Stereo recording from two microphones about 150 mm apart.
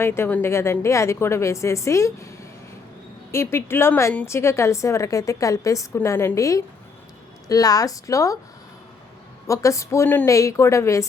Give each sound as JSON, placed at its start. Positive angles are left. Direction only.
{"t": 0.0, "sound": "a woman's voice", "side_deg": 15}
{"t": 3.3, "sound": "a woman's voice", "side_deg": 15}
{"t": 9.5, "sound": "a woman's voice", "side_deg": 20}